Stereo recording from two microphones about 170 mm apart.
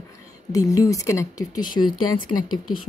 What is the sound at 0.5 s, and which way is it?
Speech, 20° left (ahead or behind).